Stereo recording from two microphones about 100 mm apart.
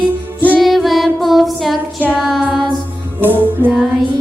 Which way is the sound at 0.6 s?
Centre (ahead or behind).